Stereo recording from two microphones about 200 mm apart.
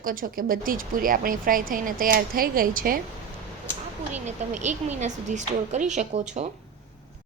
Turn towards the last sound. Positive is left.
turn(degrees=-35)  # may be behind; listen again after turning